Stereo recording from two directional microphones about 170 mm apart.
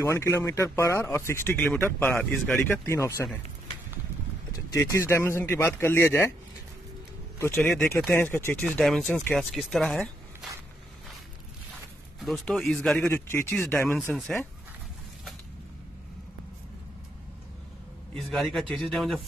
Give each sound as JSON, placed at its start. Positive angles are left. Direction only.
{"t": 0.0, "sound": "speech", "side_deg": 15}
{"t": 4.5, "sound": "speech", "side_deg": 15}
{"t": 7.4, "sound": "speech", "side_deg": 5}
{"t": 12.2, "sound": "speech", "side_deg": 0}
{"t": 13.1, "sound": "speech", "side_deg": 15}
{"t": 18.1, "sound": "speech", "side_deg": 0}